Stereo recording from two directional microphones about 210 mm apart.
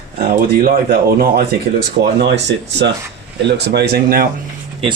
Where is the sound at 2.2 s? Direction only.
55° right (ahead or behind).